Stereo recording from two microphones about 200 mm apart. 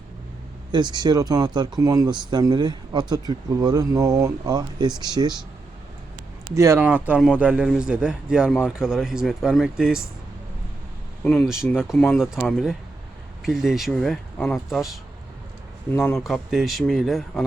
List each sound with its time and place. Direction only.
0.7 s speech: 20° right (ahead or behind)
6.5 s a man's voice: 15° right (ahead or behind)
11.2 s a man's voice: 5° left (ahead or behind)
16.0 s a man's voice: centre (ahead or behind)